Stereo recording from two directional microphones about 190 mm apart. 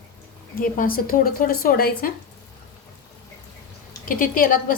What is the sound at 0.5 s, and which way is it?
Speech, 50° left (ahead or behind).